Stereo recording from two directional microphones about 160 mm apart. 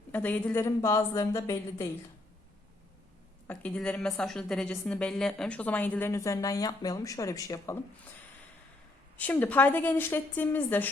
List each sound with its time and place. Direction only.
0.1 s a woman's voice: 10° left (ahead or behind)
3.4 s a woman's voice: 10° left (ahead or behind)
9.1 s a woman's voice: 10° left (ahead or behind)